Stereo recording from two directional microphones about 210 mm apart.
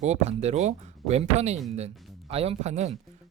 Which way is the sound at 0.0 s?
30° right (ahead or behind).